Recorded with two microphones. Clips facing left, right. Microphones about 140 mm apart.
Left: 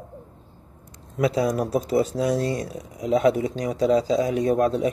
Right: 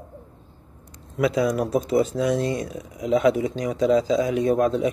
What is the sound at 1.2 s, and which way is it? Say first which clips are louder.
Speech: right 1 dB; 35° left (ahead or behind).